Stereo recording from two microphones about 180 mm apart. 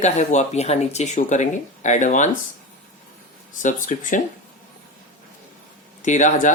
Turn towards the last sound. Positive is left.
turn(degrees=45)  # may be behind; listen again after turning